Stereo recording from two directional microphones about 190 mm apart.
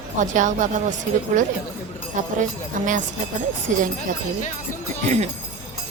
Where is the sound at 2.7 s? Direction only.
45° right (ahead or behind).